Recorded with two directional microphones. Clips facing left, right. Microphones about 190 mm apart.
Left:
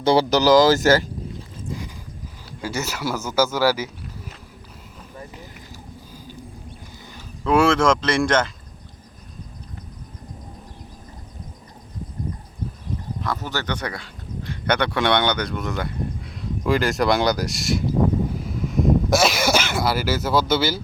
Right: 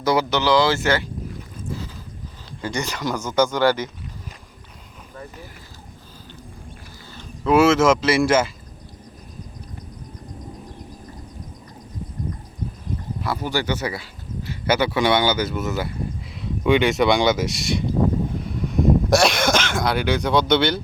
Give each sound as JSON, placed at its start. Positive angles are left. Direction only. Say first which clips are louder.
{"t": 0.0, "sound": "speech", "louder": "left 3 dB", "side_deg": 30}
{"t": 1.7, "sound": "a sound", "louder": "right 1 dB", "side_deg": 15}
{"t": 2.6, "sound": "speech", "louder": "right 1 dB", "side_deg": 5}
{"t": 7.4, "sound": "speech", "louder": "right 2 dB", "side_deg": -5}
{"t": 13.2, "sound": "speech", "louder": "right 4 dB", "side_deg": -10}
{"t": 18.3, "sound": "a sound", "louder": "right 1 dB", "side_deg": 0}